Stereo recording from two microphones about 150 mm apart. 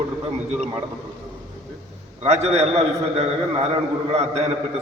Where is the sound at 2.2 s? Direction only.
45° right (ahead or behind).